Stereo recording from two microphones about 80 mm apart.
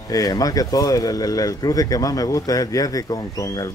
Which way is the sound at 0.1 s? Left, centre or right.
Left.